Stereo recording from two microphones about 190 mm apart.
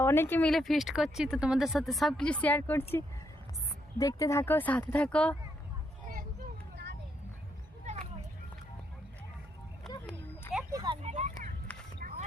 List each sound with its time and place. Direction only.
0.0 s speech: 15° left (ahead or behind)
7.9 s children playing: 40° right (ahead or behind)
9.9 s a sound: 20° left (ahead or behind)
10.7 s vehicle: 20° right (ahead or behind)
11.0 s vehicle: 35° right (ahead or behind)